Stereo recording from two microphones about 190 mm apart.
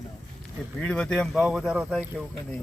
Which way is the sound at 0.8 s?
5° left (ahead or behind).